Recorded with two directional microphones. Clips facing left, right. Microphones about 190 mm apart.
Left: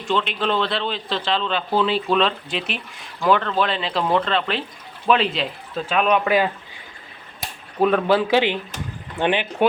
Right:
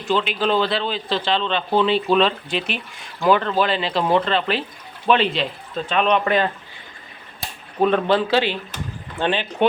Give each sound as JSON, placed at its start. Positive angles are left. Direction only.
{"t": 0.0, "sound": "a man's voice", "side_deg": -5}
{"t": 7.8, "sound": "speech", "side_deg": 5}